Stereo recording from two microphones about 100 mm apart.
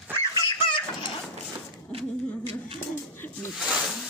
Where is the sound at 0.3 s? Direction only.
40° left (ahead or behind).